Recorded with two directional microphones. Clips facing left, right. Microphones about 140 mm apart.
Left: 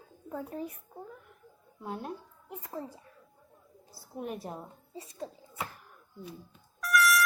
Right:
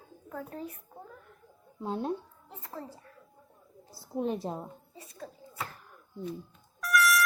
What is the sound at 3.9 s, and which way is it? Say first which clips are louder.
Speech: right 6 dB; 25° right (ahead or behind).